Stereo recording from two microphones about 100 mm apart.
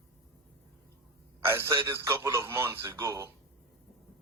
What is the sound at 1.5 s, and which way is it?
A man's voice, 25° right (ahead or behind).